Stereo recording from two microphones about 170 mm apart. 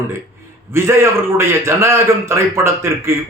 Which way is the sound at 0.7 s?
15° right (ahead or behind).